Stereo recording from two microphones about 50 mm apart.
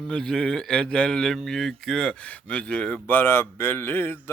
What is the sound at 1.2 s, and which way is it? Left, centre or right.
Speech, centre.